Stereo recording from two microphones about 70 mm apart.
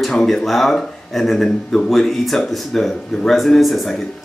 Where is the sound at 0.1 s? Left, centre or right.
Centre.